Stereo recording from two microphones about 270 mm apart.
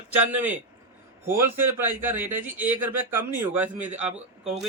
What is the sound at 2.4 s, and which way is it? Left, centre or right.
Speech, centre.